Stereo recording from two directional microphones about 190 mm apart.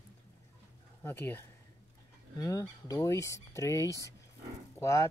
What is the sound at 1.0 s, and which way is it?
Speech, 10° left (ahead or behind).